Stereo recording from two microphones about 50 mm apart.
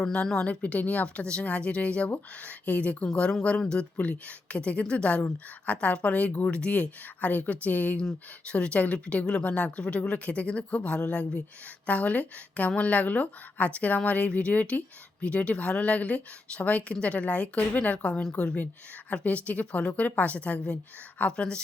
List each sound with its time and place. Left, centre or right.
0.3 s a woman's voice: left
1.0 s a woman's voice: left